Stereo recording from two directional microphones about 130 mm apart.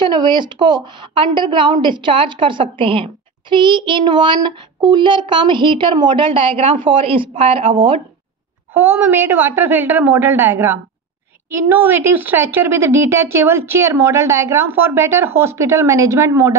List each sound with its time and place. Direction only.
0.0 s a child's voice: 35° right (ahead or behind)
8.7 s a woman's voice: 15° right (ahead or behind)